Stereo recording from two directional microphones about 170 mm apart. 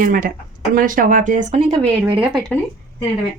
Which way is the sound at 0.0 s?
55° right (ahead or behind).